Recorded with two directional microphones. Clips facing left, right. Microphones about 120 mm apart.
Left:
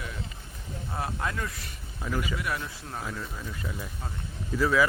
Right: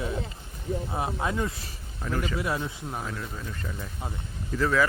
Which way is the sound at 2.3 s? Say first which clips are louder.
Right 4 dB; 25° right (ahead or behind).